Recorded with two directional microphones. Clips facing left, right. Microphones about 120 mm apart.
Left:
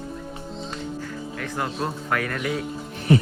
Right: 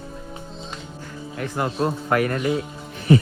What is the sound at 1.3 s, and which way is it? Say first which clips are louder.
A man's voice: right 5 dB; 25° right (ahead or behind).